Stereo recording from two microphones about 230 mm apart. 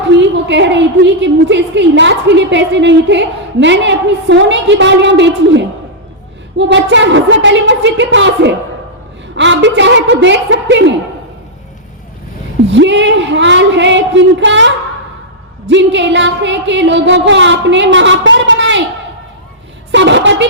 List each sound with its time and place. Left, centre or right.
0.1 s a woman's voice: right
12.7 s a woman's voice: right
15.7 s a woman's voice: right
19.9 s a woman's voice: right